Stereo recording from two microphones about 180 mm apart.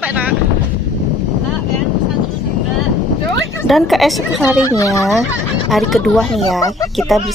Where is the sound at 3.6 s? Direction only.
Centre (ahead or behind).